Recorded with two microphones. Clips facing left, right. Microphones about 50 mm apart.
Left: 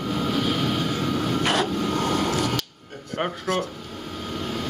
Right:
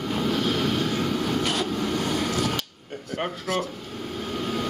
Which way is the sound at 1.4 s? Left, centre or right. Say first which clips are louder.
Left 3 dB; left.